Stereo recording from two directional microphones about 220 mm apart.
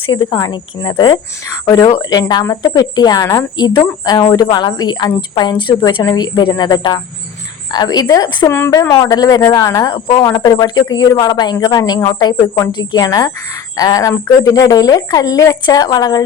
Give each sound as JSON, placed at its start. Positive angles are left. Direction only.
{"t": 0.1, "sound": "a woman's voice", "side_deg": 20}